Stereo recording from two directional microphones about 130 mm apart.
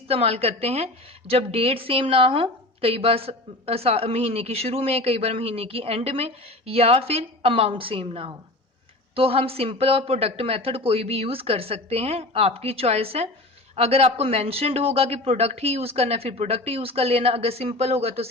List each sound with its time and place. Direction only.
0.1 s a woman's voice: 50° right (ahead or behind)